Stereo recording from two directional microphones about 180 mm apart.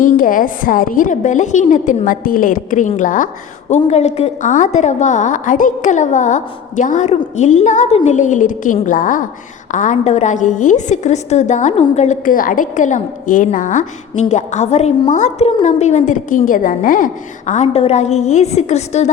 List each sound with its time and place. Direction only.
0.0 s a woman's voice: 50° left (ahead or behind)